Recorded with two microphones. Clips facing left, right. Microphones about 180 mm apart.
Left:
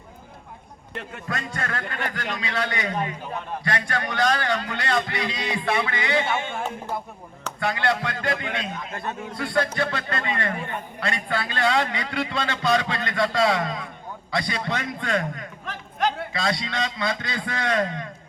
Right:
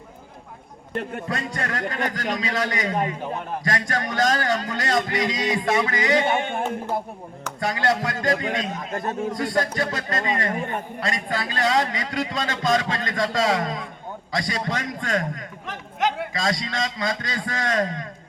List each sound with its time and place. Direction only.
0.9 s a man's voice: 40° right (ahead or behind)
7.6 s a man's voice: 40° right (ahead or behind)
15.6 s a sound: 20° right (ahead or behind)
16.3 s a man's voice: 40° right (ahead or behind)